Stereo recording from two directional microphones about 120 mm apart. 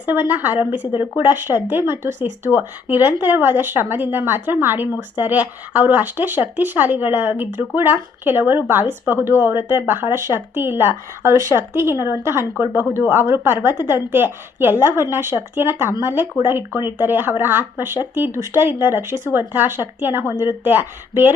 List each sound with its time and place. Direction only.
0.1 s speech: 15° right (ahead or behind)